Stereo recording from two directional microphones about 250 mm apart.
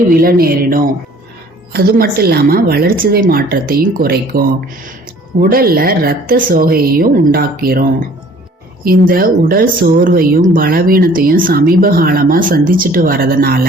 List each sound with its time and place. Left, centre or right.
0.1 s speech: right